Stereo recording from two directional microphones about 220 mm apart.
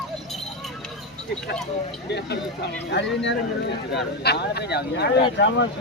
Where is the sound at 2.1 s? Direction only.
50° left (ahead or behind).